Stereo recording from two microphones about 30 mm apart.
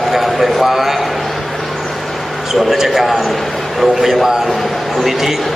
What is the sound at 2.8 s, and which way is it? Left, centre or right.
A man's voice, centre.